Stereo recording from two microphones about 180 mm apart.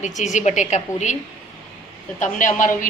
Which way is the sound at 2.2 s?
45° left (ahead or behind).